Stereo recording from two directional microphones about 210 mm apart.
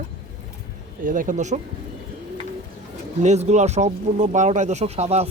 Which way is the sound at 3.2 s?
30° right (ahead or behind).